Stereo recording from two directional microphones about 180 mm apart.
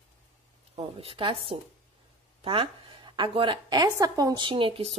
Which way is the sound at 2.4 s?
30° right (ahead or behind).